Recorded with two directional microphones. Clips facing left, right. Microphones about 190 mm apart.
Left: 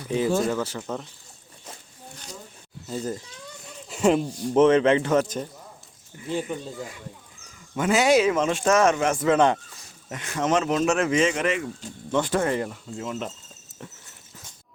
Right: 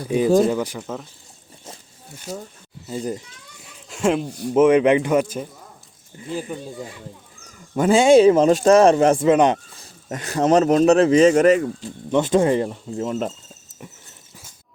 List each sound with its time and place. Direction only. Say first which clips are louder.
0.1 s a man's voice: right 6 dB; 10° right (ahead or behind)
2.8 s a man's voice: right 3 dB; 15° right (ahead or behind)
3.8 s a man's voice: even; centre (ahead or behind)
7.8 s speech: right 7 dB; 30° right (ahead or behind)
9.2 s speech: right 4 dB; 20° right (ahead or behind)
9.7 s speech: right 6 dB; 35° right (ahead or behind)
12.1 s speech: right 6 dB; 20° right (ahead or behind)
13.0 s speech: right 7 dB; 40° right (ahead or behind)